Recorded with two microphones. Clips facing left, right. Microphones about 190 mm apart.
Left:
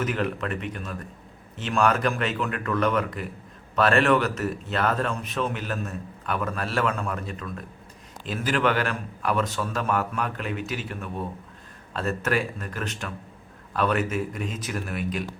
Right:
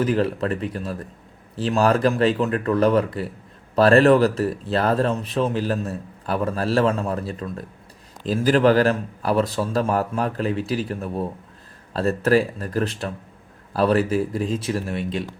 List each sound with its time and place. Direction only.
0.0 s speech: 30° right (ahead or behind)